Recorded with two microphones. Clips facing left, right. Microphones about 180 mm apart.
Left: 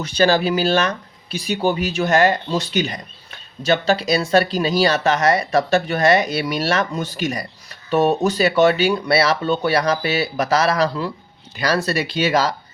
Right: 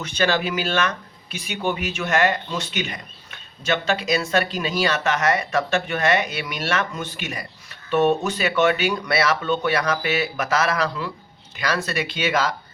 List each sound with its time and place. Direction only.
0.0 s speech: 35° left (ahead or behind)